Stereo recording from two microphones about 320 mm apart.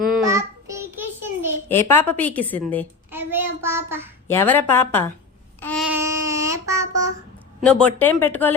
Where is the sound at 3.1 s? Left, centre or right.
Centre.